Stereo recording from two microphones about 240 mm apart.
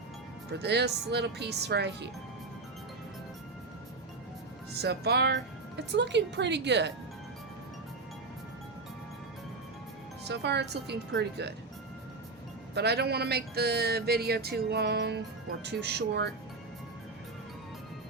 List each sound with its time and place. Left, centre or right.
0.5 s speech: right
4.7 s speech: right
10.2 s speech: right
12.7 s speech: right